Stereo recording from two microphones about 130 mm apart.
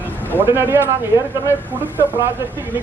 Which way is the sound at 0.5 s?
15° right (ahead or behind).